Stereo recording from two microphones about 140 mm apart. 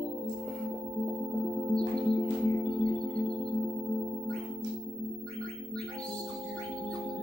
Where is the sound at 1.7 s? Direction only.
Centre (ahead or behind).